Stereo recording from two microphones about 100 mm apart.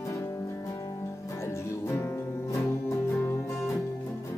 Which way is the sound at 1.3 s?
30° left (ahead or behind).